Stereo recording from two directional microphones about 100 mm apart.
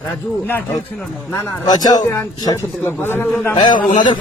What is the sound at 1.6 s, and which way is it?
Speech, 40° left (ahead or behind).